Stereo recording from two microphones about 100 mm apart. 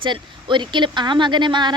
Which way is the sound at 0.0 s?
55° right (ahead or behind).